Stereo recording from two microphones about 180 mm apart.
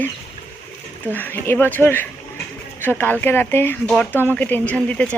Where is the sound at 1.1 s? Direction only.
10° left (ahead or behind).